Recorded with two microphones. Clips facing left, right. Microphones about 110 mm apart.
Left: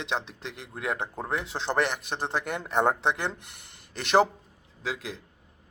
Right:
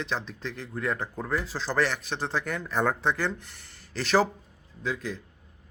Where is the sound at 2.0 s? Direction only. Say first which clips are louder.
Even; 55° left (ahead or behind).